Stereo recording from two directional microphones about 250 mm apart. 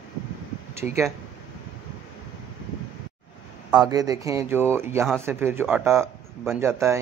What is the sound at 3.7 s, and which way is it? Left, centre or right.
Speech, centre.